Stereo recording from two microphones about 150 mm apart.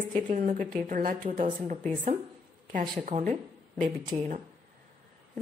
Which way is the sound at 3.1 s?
55° right (ahead or behind).